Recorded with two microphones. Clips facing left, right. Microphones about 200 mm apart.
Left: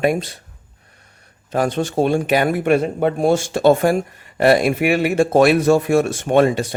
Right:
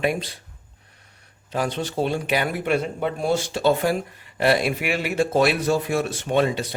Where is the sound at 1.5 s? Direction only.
45° left (ahead or behind).